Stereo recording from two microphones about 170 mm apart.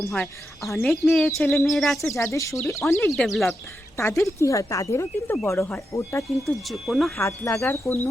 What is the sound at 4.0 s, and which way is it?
Speech, 15° left (ahead or behind).